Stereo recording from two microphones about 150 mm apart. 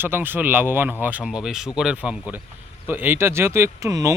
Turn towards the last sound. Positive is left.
turn(degrees=-20)  # may be behind; listen again after turning